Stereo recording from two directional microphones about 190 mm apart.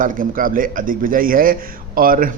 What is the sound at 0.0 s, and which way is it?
A man's voice, 45° right (ahead or behind).